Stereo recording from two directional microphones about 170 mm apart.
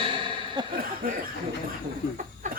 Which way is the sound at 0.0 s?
30° right (ahead or behind).